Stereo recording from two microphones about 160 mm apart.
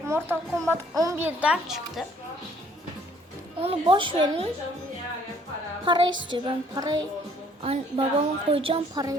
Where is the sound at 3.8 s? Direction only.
30° right (ahead or behind).